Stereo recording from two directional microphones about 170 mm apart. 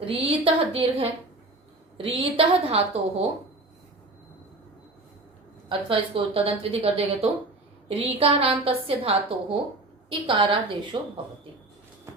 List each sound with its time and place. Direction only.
0.0 s a woman's voice: 30° right (ahead or behind)
5.6 s a woman's voice: 30° right (ahead or behind)